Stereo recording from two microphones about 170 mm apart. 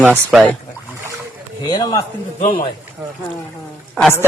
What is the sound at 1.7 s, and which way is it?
Speech, 25° left (ahead or behind).